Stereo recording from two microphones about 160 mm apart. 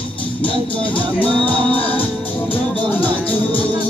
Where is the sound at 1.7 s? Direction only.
10° left (ahead or behind).